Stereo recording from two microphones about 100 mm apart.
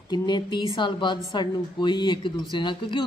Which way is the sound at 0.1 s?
50° left (ahead or behind).